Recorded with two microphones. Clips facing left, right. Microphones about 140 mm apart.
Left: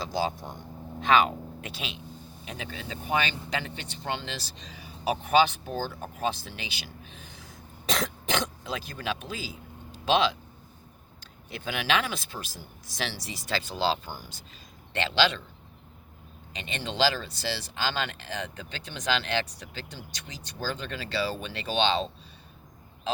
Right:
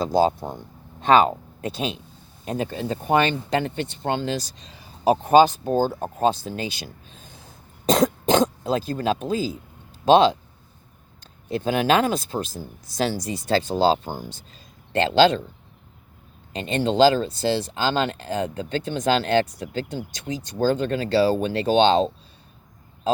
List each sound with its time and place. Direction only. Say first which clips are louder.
0.0 s speech: right 10 dB; 40° right (ahead or behind)
7.9 s speech: right 11 dB; 45° right (ahead or behind)
11.5 s speech: right 9 dB; 40° right (ahead or behind)
16.6 s speech: right 10 dB; 40° right (ahead or behind)